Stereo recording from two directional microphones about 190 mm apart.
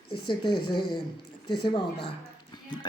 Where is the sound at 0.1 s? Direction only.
25° left (ahead or behind).